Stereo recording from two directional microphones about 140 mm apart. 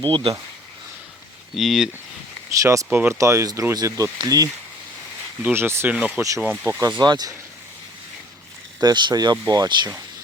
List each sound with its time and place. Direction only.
0.0 s speech: 40° right (ahead or behind)
1.5 s speech: centre (ahead or behind)
2.6 s speech: 20° right (ahead or behind)
5.4 s speech: 15° right (ahead or behind)
6.7 s speech: 30° right (ahead or behind)
8.8 s speech: 30° right (ahead or behind)